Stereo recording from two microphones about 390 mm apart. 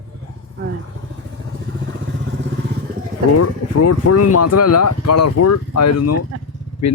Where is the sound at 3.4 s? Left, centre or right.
Left.